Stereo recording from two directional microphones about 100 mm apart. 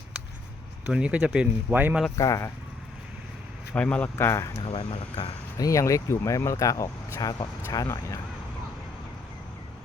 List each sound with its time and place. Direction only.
0.9 s speech: 10° right (ahead or behind)
2.1 s speech: 35° left (ahead or behind)
3.8 s speech: 10° left (ahead or behind)
4.2 s speech: 25° left (ahead or behind)
4.6 s speech: 65° left (ahead or behind)
5.5 s speech: 35° left (ahead or behind)